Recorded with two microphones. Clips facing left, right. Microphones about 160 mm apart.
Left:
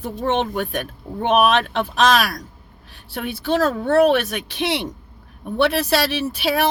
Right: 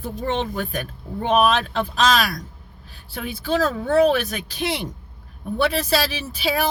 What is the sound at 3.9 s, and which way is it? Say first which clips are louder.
Speech: left 2 dB; 70° left (ahead or behind).